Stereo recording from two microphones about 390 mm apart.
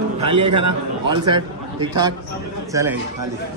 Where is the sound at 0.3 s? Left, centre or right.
Right.